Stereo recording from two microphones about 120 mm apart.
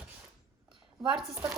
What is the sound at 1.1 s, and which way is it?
Speech, 5° right (ahead or behind).